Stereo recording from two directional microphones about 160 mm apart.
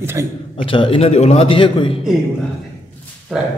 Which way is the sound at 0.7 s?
35° left (ahead or behind).